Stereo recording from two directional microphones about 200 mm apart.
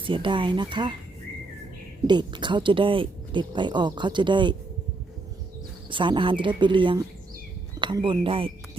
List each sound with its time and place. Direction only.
0.0 s speech: 25° right (ahead or behind)
2.0 s speech: 20° right (ahead or behind)
5.9 s speech: 25° right (ahead or behind)